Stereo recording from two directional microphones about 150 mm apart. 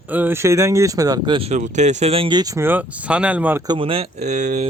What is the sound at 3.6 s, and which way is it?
Speech, 30° right (ahead or behind).